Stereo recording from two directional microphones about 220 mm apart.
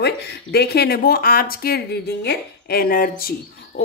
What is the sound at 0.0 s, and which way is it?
Speech, 45° left (ahead or behind).